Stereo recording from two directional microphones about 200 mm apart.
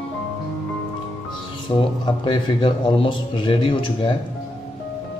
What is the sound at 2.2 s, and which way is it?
A man's voice, 25° left (ahead or behind).